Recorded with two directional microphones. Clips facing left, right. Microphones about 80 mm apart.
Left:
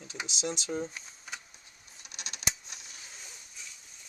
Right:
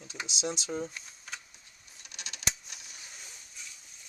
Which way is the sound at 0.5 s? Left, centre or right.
Centre.